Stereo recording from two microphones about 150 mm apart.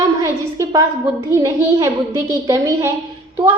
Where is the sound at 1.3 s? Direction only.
20° right (ahead or behind).